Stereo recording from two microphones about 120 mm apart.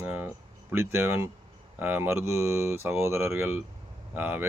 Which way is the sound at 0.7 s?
20° right (ahead or behind).